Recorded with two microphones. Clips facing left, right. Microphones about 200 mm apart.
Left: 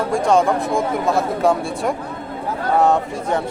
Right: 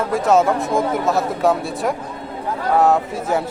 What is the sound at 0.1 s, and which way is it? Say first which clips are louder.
Speech: right 1 dB; 5° right (ahead or behind).